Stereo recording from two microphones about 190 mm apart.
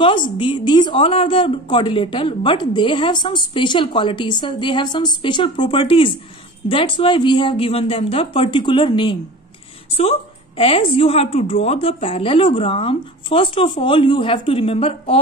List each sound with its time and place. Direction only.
0.0 s speech: 25° left (ahead or behind)
10.6 s speech: 30° left (ahead or behind)